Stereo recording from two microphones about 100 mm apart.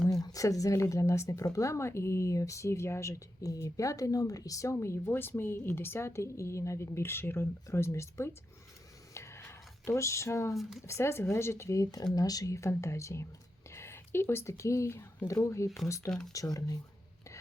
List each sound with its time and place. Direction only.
0.1 s speech: 35° left (ahead or behind)
9.1 s a sound: 30° left (ahead or behind)
10.6 s speech: 5° right (ahead or behind)
10.8 s speech: 25° left (ahead or behind)